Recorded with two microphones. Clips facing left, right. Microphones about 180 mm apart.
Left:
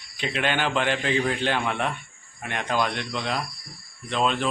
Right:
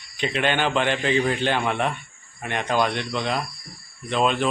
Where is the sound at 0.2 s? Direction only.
Centre (ahead or behind).